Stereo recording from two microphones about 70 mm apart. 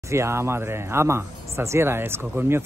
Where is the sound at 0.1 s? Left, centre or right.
Right.